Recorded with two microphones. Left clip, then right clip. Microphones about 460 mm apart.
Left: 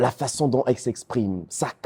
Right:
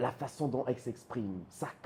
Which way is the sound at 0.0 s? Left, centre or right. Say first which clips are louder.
Left 12 dB; left.